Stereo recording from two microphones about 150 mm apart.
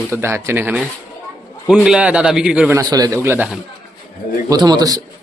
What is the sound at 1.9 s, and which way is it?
Speech, 10° right (ahead or behind).